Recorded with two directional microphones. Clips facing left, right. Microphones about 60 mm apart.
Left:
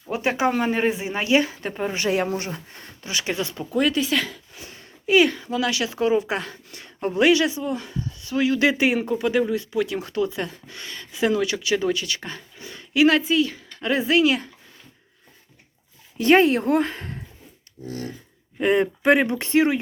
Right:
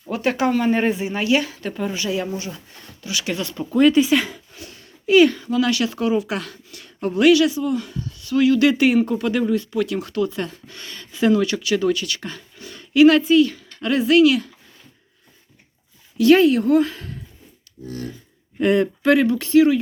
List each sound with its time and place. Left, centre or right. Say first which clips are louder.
0.1 s speech: right 2 dB; centre
0.7 s a man's voice: right 3 dB; centre
0.9 s speech: right 1 dB; left
2.0 s speech: left 2 dB; left
3.0 s speech: right 1 dB; left
3.3 s speech: even; centre
3.6 s speech: right 8 dB; centre
4.5 s speech: right 2 dB; centre
6.1 s speech: even; left
14.3 s speech: right 4 dB; left
16.1 s speech: right 3 dB; left
18.6 s speech: right 2 dB; centre